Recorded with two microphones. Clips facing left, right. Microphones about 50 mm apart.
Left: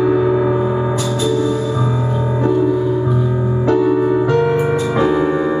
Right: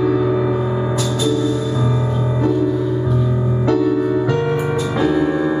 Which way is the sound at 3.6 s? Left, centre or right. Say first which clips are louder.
Left 2 dB; centre.